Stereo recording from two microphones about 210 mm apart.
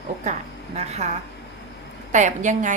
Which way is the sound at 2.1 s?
35° right (ahead or behind).